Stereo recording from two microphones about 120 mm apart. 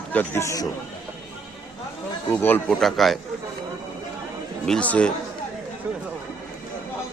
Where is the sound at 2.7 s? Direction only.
5° left (ahead or behind).